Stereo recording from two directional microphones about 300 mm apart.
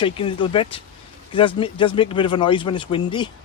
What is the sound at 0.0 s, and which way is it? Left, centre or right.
Speech, centre.